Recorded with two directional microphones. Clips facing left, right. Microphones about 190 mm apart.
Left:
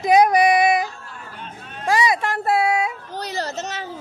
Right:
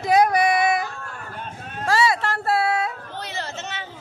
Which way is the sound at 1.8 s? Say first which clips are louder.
Left 1 dB; 15° left (ahead or behind).